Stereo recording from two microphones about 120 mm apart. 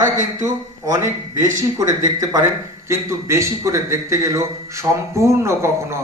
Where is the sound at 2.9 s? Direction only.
25° right (ahead or behind).